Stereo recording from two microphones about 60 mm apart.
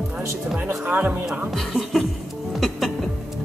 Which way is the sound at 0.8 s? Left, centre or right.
Right.